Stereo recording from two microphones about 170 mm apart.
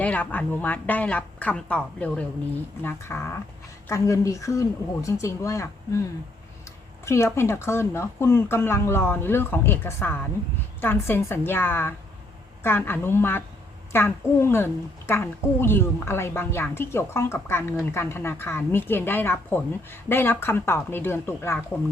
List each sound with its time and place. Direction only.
0.0 s a woman's voice: 10° left (ahead or behind)
7.0 s a woman's voice: 15° left (ahead or behind)